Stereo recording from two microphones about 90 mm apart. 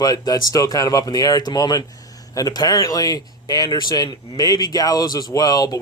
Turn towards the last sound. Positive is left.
turn(degrees=45)  # may be behind; listen again after turning